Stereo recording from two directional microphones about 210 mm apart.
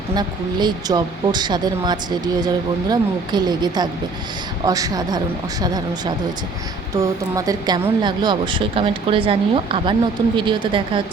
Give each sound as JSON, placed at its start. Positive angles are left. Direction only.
{"t": 0.2, "sound": "speech", "side_deg": -20}